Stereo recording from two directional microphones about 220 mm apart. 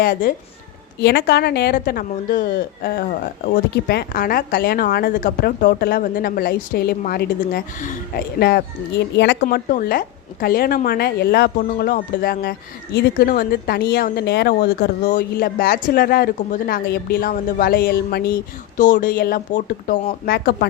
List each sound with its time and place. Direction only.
0.0 s a woman's voice: 45° left (ahead or behind)
9.6 s a woman's voice: 40° left (ahead or behind)